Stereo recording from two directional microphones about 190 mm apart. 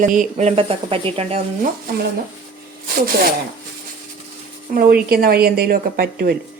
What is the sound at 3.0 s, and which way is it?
Speech, 50° right (ahead or behind).